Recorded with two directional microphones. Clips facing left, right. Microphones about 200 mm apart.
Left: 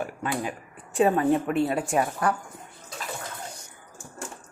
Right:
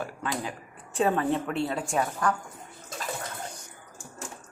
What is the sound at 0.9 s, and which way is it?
Speech, 10° left (ahead or behind).